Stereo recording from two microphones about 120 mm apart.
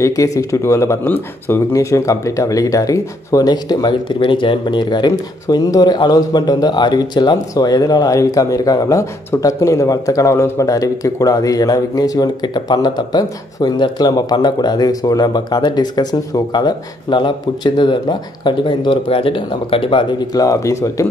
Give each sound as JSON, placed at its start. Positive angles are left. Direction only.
{"t": 0.0, "sound": "speech", "side_deg": 25}